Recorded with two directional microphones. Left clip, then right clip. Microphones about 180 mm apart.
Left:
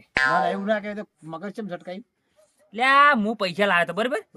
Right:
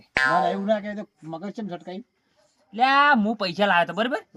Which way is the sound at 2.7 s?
15° left (ahead or behind).